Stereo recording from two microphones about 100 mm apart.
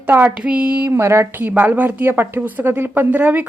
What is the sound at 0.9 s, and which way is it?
A woman's voice, 25° right (ahead or behind).